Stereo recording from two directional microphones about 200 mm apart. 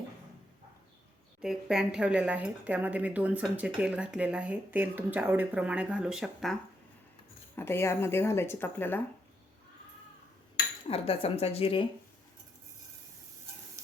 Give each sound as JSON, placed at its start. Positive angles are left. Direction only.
{"t": 1.4, "sound": "speech", "side_deg": -5}
{"t": 7.5, "sound": "speech", "side_deg": 10}
{"t": 10.8, "sound": "speech", "side_deg": 30}